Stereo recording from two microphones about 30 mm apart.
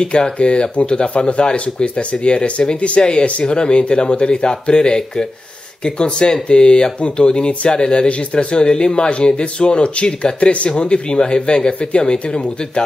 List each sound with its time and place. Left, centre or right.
0.0 s speech: left
3.0 s speech: left